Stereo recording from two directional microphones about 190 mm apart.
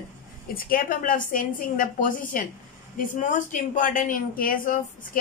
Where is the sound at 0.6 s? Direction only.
50° left (ahead or behind).